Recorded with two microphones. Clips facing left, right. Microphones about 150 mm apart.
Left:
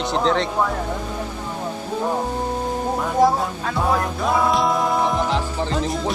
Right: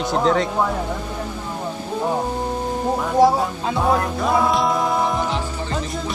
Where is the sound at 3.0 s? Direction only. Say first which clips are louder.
Right 2 dB; centre (ahead or behind).